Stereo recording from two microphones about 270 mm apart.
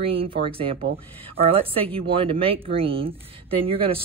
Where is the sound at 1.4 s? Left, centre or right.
Right.